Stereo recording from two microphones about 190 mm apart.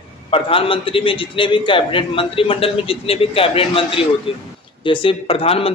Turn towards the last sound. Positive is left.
turn(degrees=30)  # may be behind; listen again after turning